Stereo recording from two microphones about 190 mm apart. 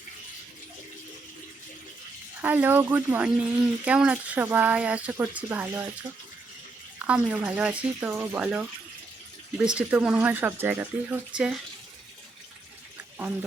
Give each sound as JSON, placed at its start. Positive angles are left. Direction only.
{"t": 2.4, "sound": "speech", "side_deg": -10}
{"t": 7.0, "sound": "speech", "side_deg": -5}